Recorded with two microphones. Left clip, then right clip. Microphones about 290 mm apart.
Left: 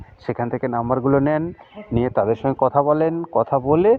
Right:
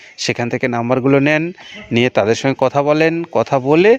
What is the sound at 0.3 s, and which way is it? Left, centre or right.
Speech, right.